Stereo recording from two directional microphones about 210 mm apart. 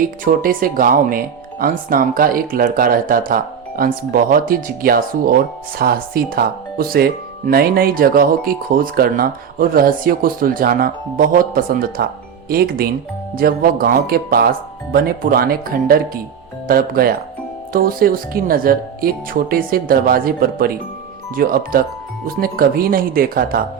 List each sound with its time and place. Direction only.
0.0 s speech: 40° right (ahead or behind)